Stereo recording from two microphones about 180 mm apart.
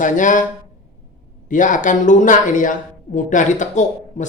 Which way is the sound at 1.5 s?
45° left (ahead or behind).